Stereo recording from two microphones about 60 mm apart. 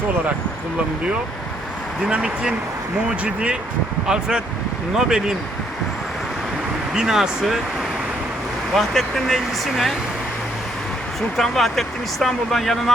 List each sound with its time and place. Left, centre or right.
2.0 s speech: centre
6.9 s speech: centre
8.7 s speech: centre
11.3 s speech: centre